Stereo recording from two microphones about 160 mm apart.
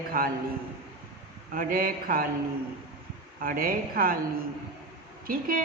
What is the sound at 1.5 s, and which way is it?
Speech, 60° right (ahead or behind).